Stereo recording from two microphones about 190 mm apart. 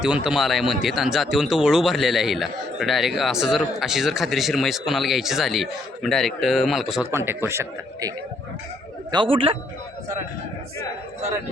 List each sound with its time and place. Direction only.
0.0 s speech: 5° right (ahead or behind)
7.1 s a man's voice: 15° right (ahead or behind)
9.1 s a man's voice: 25° right (ahead or behind)